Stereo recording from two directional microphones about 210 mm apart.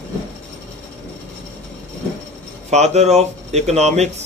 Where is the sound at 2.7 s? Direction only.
30° right (ahead or behind).